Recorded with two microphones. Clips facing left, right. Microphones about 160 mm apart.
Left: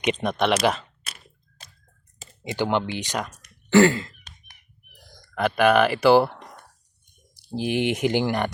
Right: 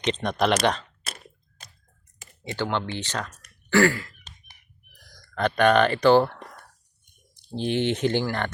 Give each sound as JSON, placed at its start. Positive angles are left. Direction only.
{"t": 0.0, "sound": "speech", "side_deg": 5}
{"t": 2.2, "sound": "speech", "side_deg": 15}
{"t": 3.7, "sound": "throat clearing", "side_deg": 20}
{"t": 4.9, "sound": "a sound", "side_deg": 25}
{"t": 5.3, "sound": "speech", "side_deg": 5}